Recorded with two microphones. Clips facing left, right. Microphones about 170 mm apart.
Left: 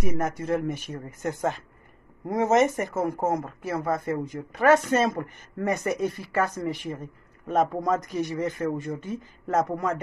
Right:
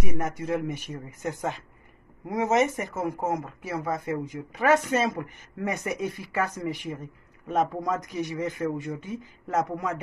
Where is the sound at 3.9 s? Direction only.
15° right (ahead or behind).